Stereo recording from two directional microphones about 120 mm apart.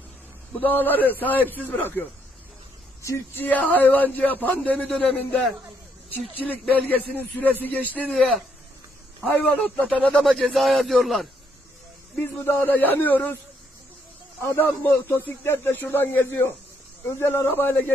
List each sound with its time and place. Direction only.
0.6 s speech: 15° left (ahead or behind)
3.4 s a man's voice: 15° left (ahead or behind)
6.9 s speech: 15° left (ahead or behind)
7.8 s a man's voice: 15° right (ahead or behind)
8.1 s a man's voice: centre (ahead or behind)
12.2 s speech: 20° left (ahead or behind)
14.5 s speech: 20° left (ahead or behind)